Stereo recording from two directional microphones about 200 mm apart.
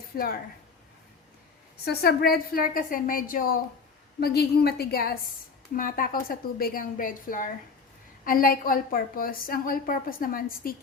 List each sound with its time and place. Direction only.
0.1 s a woman's voice: 45° left (ahead or behind)
1.8 s a woman's voice: 50° left (ahead or behind)